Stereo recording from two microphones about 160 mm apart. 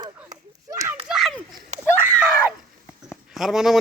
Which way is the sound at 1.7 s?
50° right (ahead or behind).